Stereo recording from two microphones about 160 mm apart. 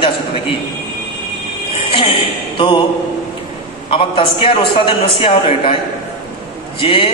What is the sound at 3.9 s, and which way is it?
A man's voice, 35° left (ahead or behind).